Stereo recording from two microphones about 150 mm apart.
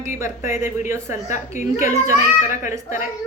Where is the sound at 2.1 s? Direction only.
20° right (ahead or behind).